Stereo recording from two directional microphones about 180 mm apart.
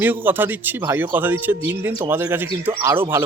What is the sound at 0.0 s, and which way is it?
Speech, 10° right (ahead or behind).